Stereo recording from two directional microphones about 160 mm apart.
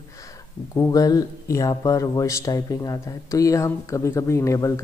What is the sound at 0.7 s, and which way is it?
Speech, 20° left (ahead or behind).